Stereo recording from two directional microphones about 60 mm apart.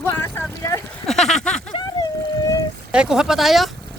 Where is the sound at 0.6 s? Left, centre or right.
Left.